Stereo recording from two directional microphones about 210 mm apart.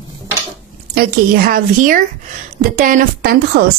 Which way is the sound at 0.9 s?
45° right (ahead or behind).